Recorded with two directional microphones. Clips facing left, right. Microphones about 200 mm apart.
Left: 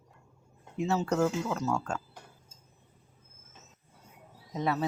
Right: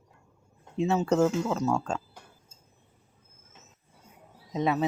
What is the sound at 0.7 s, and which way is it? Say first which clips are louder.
Speech: right 4 dB; 25° right (ahead or behind).